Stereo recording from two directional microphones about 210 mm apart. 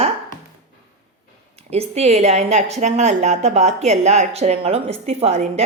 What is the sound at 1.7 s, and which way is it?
A woman's voice, 30° right (ahead or behind).